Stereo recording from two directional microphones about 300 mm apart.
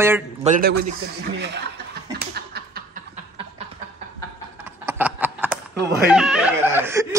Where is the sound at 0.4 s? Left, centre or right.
Right.